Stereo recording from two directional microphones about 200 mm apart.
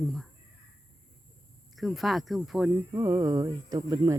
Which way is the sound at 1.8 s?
Centre (ahead or behind).